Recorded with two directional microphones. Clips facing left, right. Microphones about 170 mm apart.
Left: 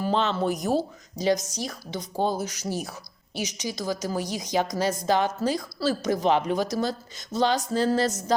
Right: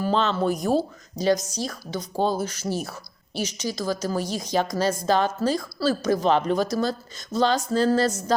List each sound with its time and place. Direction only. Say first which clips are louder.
0.0 s a woman's voice: right 2 dB; 20° left (ahead or behind)
7.7 s music: right 3 dB; 20° left (ahead or behind)